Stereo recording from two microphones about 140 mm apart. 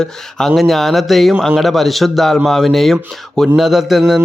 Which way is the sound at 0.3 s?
Centre (ahead or behind).